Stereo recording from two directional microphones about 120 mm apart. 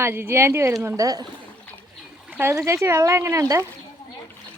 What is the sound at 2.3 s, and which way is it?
Speech, 20° right (ahead or behind).